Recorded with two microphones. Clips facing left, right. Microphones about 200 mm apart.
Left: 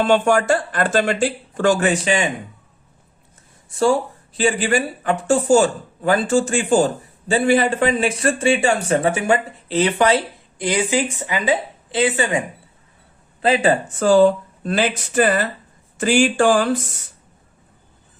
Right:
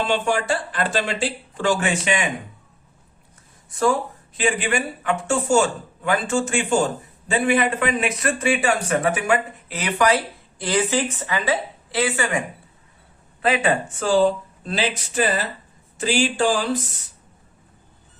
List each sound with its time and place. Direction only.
0.0 s speech: 45° left (ahead or behind)
3.7 s speech: 30° left (ahead or behind)
13.4 s speech: 30° left (ahead or behind)
14.0 s speech: 45° left (ahead or behind)